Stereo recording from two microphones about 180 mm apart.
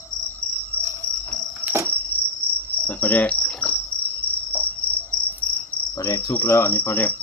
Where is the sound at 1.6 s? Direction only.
10° right (ahead or behind).